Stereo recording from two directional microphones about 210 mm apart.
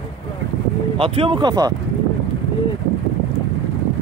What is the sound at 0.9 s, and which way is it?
Speech, 25° right (ahead or behind).